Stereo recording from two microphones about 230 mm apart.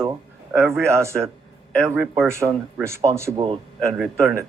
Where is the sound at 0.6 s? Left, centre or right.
Centre.